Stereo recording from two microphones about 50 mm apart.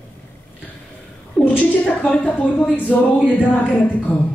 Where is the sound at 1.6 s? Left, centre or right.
Left.